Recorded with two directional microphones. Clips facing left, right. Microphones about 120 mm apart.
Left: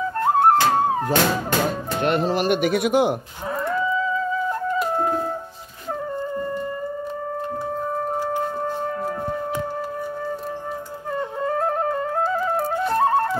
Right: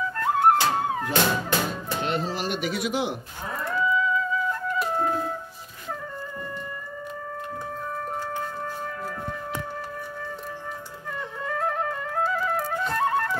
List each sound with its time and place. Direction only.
0.2 s music: 35° left (ahead or behind)
2.0 s speech: 60° left (ahead or behind)
3.8 s music: 35° left (ahead or behind)
11.1 s flute: 35° left (ahead or behind)